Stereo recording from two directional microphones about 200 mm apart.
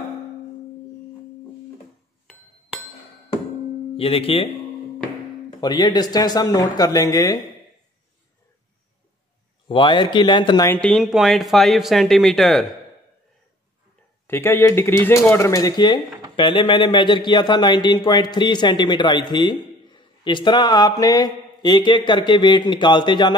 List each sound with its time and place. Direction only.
3.9 s speech: 30° left (ahead or behind)
5.6 s a man's voice: 20° left (ahead or behind)
9.7 s a man's voice: 25° left (ahead or behind)
10.7 s speech: 5° left (ahead or behind)
14.2 s a man's voice: 10° left (ahead or behind)